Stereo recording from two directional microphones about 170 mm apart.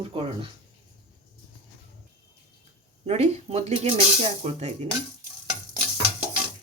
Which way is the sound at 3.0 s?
40° right (ahead or behind).